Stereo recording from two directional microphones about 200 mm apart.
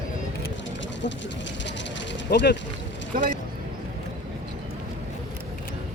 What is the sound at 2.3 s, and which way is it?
Speech, 60° left (ahead or behind).